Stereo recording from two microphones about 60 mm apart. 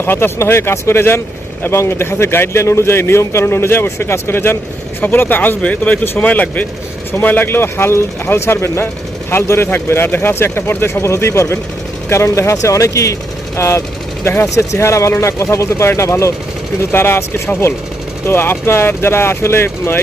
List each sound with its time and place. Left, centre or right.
0.0 s a man's voice: left
9.6 s speech: left
13.6 s a man's voice: left
16.9 s a man's voice: left